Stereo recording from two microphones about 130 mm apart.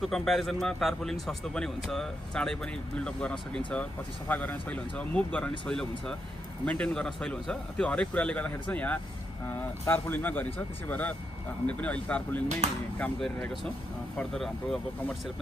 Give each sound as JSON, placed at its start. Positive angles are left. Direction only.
{"t": 0.0, "sound": "a man's voice", "side_deg": 0}
{"t": 12.4, "sound": "speech", "side_deg": -60}
{"t": 13.0, "sound": "a man's voice", "side_deg": 10}